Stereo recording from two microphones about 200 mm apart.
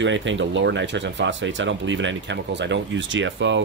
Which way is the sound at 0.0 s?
65° right (ahead or behind).